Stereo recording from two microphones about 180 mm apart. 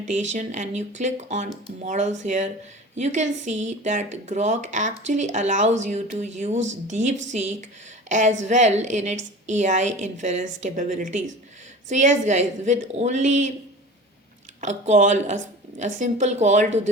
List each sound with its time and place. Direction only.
0.1 s speech: 40° right (ahead or behind)
14.6 s speech: 40° right (ahead or behind)